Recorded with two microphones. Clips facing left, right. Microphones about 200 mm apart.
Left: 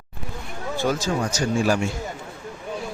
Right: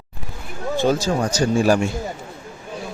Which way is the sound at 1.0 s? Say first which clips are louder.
Right 4 dB; 35° right (ahead or behind).